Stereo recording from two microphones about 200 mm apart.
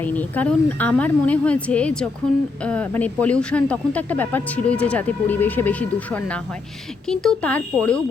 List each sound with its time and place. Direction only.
0.0 s speech: 10° left (ahead or behind)